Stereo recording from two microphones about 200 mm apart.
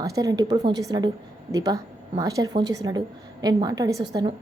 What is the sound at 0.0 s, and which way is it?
A woman's voice, 15° right (ahead or behind).